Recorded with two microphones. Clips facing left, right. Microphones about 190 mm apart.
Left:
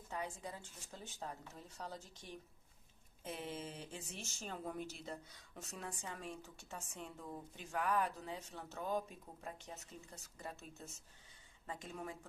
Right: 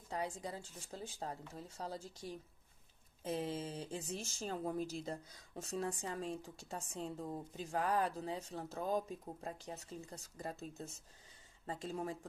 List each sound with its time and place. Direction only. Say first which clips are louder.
0.1 s a woman's voice: right 4 dB; 35° right (ahead or behind)